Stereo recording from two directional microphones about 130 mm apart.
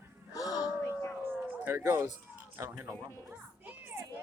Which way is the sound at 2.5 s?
20° right (ahead or behind).